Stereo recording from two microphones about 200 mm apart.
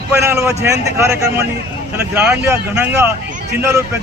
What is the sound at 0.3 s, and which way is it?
A man's voice, 15° right (ahead or behind).